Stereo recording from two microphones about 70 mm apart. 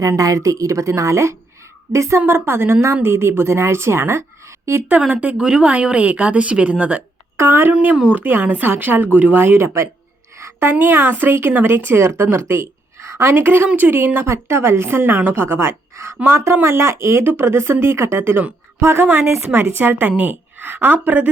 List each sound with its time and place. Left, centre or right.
0.0 s a woman's voice: right
4.9 s speech: right
7.3 s a woman's voice: right
7.7 s a woman's voice: right
12.4 s a sound: right
13.3 s a woman's voice: right
20.1 s speech: centre
20.6 s speech: right